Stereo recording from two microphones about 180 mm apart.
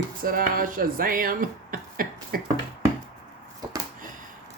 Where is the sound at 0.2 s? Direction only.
50° right (ahead or behind).